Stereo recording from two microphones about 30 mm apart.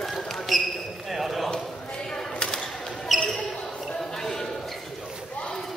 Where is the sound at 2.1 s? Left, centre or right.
Centre.